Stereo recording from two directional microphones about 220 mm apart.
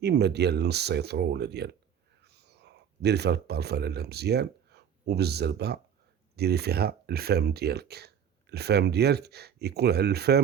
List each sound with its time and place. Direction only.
0.0 s speech: 50° right (ahead or behind)